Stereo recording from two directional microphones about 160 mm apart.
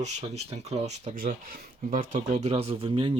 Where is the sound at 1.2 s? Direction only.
60° right (ahead or behind).